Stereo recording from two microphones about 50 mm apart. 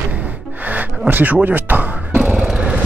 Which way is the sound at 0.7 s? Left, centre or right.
Right.